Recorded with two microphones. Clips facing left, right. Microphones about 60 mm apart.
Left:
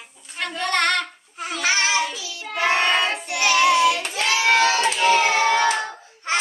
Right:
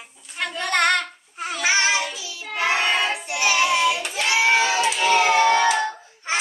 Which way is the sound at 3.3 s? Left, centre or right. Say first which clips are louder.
Left 3 dB; left.